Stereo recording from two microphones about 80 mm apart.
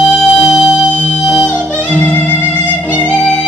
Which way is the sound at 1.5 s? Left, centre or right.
Centre.